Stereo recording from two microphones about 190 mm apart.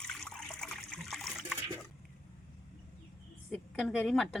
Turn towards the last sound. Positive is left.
turn(degrees=0)  # may be behind; listen again after turning